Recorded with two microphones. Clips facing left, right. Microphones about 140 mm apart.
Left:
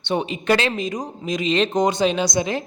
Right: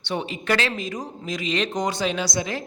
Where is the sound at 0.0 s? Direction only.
20° left (ahead or behind).